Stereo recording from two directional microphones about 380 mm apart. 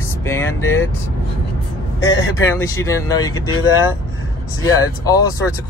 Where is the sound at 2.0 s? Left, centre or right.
Left.